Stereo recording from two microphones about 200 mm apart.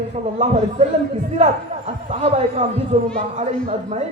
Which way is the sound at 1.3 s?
35° right (ahead or behind).